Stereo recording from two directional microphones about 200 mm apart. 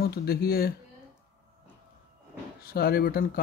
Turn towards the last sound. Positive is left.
turn(degrees=50)  # may be behind; listen again after turning